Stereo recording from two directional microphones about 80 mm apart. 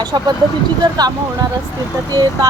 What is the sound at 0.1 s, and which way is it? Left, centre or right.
Speech, right.